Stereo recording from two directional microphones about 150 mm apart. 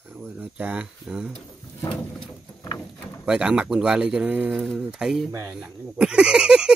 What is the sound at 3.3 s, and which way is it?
Speech, 5° right (ahead or behind).